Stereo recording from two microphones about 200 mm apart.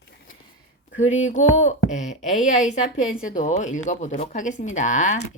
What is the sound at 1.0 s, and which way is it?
Speech, 35° left (ahead or behind).